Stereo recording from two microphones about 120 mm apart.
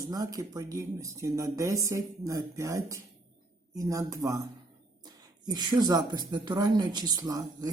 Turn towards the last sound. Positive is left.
turn(degrees=-30)  # may be behind; listen again after turning